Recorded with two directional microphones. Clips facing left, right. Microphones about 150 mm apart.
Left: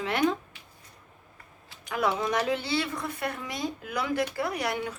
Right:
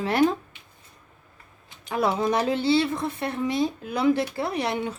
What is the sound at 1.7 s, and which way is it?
Speech, 30° right (ahead or behind).